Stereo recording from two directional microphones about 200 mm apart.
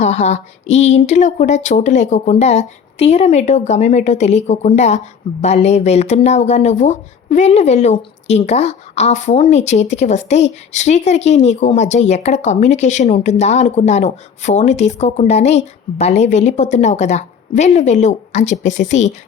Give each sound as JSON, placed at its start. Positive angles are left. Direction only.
{"t": 0.0, "sound": "speech", "side_deg": 35}